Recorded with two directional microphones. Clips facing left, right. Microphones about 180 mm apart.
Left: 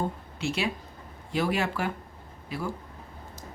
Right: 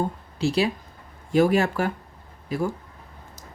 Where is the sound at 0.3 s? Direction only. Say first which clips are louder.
Right 8 dB; 35° right (ahead or behind).